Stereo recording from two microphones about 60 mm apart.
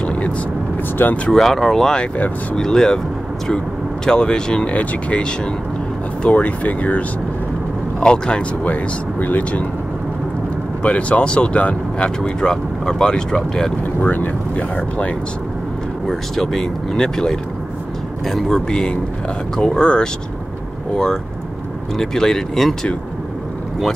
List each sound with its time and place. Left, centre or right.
0.0 s vehicle: centre
1.0 s speech: left
1.3 s speech: centre
8.6 s speech: left
10.8 s speech: left
14.0 s speech: left
16.1 s speech: centre